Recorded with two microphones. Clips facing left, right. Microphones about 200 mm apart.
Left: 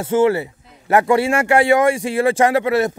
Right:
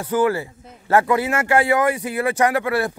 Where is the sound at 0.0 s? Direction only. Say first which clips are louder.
Left 4 dB; 25° left (ahead or behind).